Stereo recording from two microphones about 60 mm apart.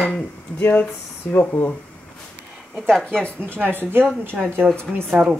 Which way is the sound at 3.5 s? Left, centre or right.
Right.